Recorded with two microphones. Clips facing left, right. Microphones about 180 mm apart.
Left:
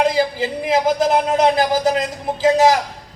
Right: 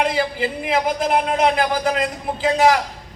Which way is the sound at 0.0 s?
40° left (ahead or behind).